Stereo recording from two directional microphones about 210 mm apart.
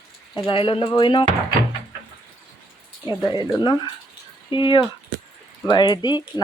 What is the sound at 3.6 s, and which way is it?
Speech, 20° left (ahead or behind).